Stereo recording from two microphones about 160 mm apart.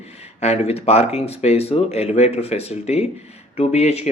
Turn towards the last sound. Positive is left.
turn(degrees=45)  # may be behind; listen again after turning